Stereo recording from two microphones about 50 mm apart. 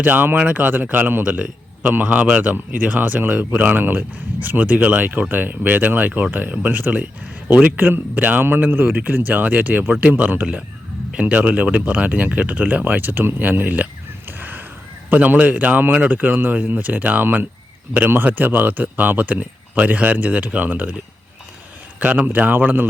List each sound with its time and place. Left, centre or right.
0.0 s speech: right
1.3 s a sound: right
1.9 s speech: right
12.8 s speech: right
14.3 s a sound: right
15.1 s speech: right
22.0 s speech: right